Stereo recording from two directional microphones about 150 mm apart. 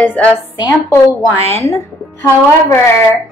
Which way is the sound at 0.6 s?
20° left (ahead or behind).